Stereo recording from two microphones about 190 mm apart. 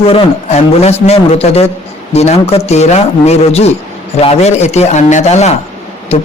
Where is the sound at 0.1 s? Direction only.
30° left (ahead or behind).